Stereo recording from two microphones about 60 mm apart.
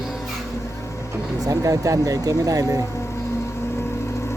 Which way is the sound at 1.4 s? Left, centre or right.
Right.